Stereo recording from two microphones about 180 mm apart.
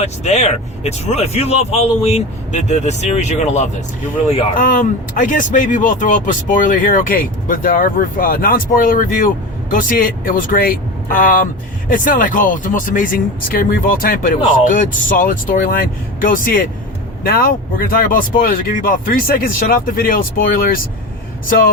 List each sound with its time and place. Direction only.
0.0 s speech: 40° left (ahead or behind)